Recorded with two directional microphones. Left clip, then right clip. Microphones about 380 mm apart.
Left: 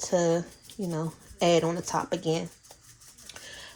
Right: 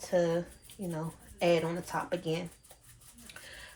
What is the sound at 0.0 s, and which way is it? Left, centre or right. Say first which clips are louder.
Speech: left 4 dB; centre.